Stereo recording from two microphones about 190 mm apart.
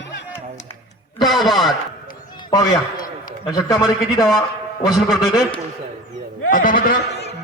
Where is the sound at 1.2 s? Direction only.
Centre (ahead or behind).